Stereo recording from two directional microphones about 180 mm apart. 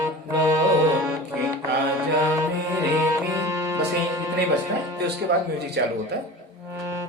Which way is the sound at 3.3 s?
15° right (ahead or behind).